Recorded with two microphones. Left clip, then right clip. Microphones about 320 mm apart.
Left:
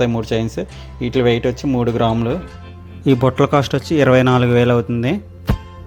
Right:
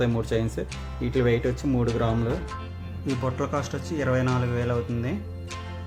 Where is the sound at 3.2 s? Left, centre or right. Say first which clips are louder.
Left 12 dB; left.